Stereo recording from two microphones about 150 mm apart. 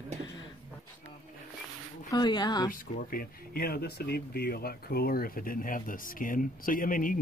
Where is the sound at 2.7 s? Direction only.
70° left (ahead or behind).